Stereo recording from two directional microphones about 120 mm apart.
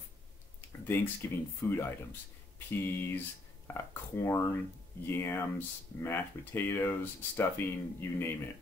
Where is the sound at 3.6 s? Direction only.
20° left (ahead or behind).